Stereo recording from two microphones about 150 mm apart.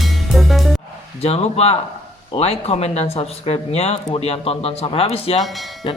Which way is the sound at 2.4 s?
45° left (ahead or behind).